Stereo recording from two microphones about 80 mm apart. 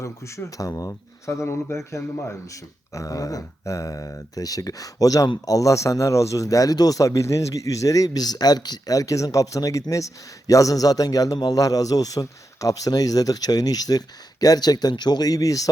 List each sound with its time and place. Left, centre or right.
0.0 s speech: left